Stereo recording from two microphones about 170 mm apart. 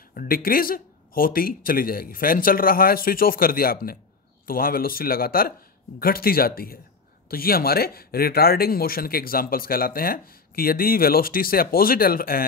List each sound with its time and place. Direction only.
0.1 s speech: 55° left (ahead or behind)